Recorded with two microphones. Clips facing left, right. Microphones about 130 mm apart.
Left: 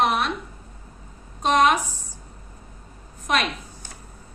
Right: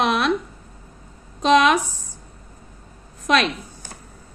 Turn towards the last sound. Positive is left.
turn(degrees=-90)